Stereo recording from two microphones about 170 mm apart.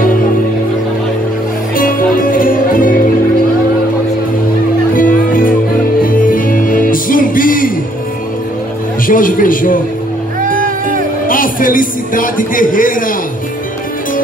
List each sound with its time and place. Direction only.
1.8 s music: 55° left (ahead or behind)
4.9 s music: 55° left (ahead or behind)
9.0 s a sound: 55° left (ahead or behind)
10.4 s music: 55° right (ahead or behind)
11.2 s a man's voice: 55° left (ahead or behind)